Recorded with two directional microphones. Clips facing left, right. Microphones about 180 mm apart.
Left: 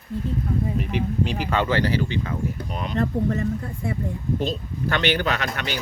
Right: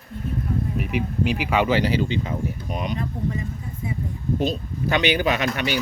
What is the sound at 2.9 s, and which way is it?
Speech, 65° left (ahead or behind).